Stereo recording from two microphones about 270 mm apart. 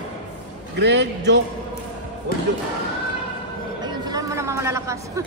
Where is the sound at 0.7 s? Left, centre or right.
Right.